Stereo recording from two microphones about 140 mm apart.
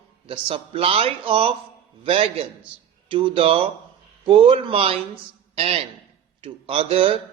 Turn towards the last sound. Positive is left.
turn(degrees=-40)  # may be behind; listen again after turning